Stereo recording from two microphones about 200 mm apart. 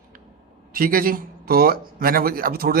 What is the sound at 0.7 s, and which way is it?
A man's voice, 45° right (ahead or behind).